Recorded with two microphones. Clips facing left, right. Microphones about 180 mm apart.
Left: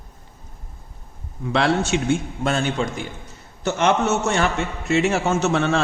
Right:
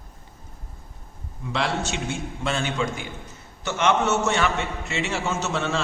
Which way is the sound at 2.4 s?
45° left (ahead or behind).